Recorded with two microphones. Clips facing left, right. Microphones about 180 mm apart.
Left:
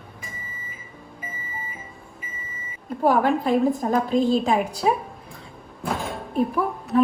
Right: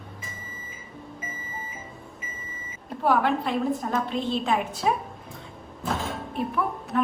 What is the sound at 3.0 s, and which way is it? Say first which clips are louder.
A woman's voice: left 4 dB; 45° left (ahead or behind).